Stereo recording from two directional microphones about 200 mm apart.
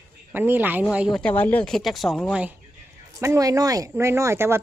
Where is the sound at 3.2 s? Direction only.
15° right (ahead or behind).